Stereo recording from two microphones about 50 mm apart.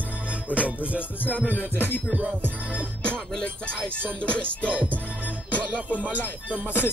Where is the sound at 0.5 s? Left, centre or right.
Right.